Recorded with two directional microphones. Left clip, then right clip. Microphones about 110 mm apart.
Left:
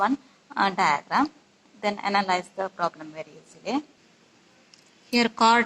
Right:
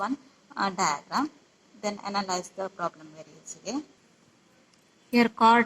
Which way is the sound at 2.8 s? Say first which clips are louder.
Left 5 dB; 25° left (ahead or behind).